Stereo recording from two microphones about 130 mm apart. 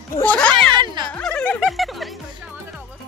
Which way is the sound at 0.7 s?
35° right (ahead or behind).